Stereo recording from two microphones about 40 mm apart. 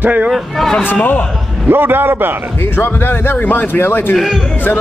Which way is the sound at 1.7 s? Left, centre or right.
Right.